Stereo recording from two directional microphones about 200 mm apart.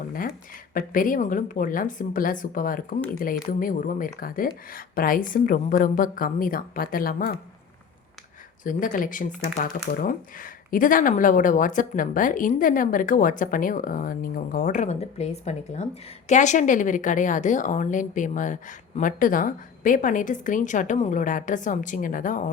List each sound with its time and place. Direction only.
0.7 s speech: 45° left (ahead or behind)
8.6 s speech: 40° left (ahead or behind)